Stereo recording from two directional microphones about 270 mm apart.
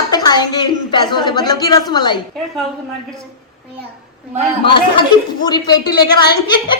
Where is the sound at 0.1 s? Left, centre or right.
Centre.